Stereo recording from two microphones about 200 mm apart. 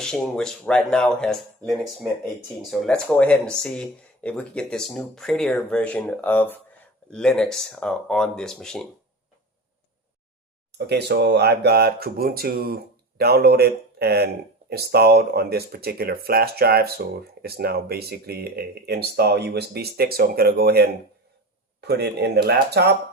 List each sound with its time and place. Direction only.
0.0 s speech: 5° left (ahead or behind)
10.7 s speech: 55° right (ahead or behind)